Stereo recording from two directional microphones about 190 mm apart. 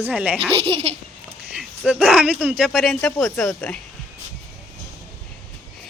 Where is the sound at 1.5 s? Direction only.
5° right (ahead or behind).